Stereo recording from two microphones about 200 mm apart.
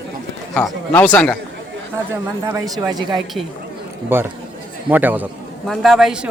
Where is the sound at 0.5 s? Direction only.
5° left (ahead or behind).